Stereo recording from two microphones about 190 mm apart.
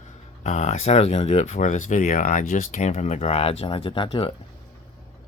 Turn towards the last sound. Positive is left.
turn(degrees=25)  # may be behind; listen again after turning